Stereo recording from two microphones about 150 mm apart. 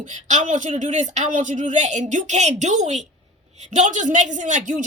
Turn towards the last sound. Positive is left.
turn(degrees=-60)  # may be behind; listen again after turning